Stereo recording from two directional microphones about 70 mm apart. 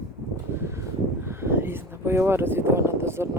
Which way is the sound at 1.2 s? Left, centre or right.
Right.